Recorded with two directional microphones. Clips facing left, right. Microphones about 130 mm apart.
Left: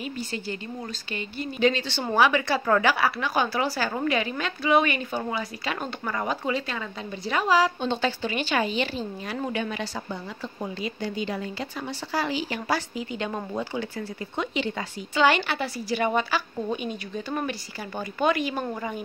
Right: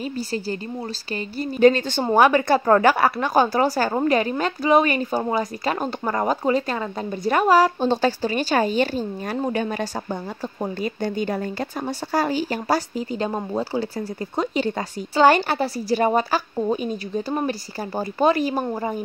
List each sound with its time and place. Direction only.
0.0 s a woman's voice: 35° right (ahead or behind); by 7.7 s 50° right (ahead or behind)
7.8 s speech: 40° right (ahead or behind)